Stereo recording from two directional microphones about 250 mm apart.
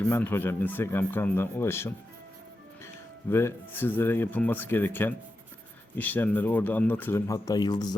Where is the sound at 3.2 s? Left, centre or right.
Centre.